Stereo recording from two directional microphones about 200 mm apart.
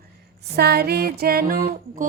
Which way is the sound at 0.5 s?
55° right (ahead or behind).